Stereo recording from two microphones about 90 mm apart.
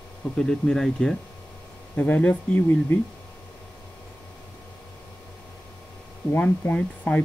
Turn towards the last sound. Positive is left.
turn(degrees=20)  # may be behind; listen again after turning